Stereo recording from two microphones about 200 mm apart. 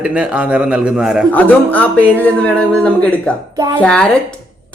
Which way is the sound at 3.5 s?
20° right (ahead or behind).